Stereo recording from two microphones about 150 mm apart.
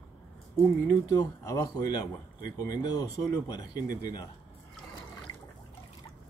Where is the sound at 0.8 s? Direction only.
20° left (ahead or behind).